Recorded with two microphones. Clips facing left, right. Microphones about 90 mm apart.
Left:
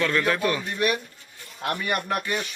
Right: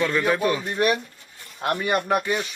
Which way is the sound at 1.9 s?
20° right (ahead or behind).